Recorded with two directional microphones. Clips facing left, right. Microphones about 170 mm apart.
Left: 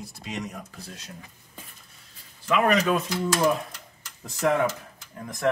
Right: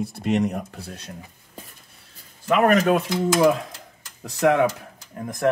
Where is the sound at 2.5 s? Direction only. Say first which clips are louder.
Right 4 dB; 45° right (ahead or behind).